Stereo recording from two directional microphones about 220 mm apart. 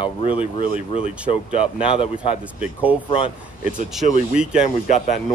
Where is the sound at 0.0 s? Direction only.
25° left (ahead or behind).